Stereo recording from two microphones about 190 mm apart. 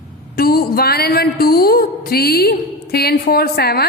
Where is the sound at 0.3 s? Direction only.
55° left (ahead or behind).